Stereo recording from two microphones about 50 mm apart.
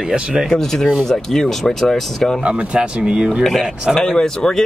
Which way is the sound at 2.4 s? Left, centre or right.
Right.